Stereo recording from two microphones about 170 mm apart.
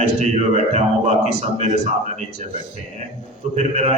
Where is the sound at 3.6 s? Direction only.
40° right (ahead or behind).